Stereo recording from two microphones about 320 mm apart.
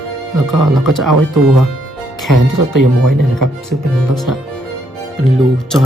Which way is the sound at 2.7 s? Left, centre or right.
Right.